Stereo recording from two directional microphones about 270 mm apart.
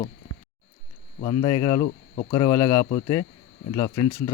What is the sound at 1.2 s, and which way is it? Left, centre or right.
Speech, centre.